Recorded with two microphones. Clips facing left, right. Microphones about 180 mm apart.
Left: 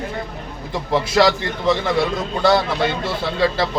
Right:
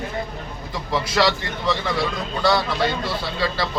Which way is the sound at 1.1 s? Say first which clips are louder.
Left 4 dB; 25° left (ahead or behind).